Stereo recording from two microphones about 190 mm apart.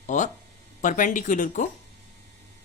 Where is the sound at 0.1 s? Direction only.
40° left (ahead or behind).